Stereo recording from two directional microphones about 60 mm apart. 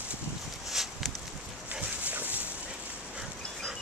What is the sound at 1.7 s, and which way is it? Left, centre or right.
Dog, right.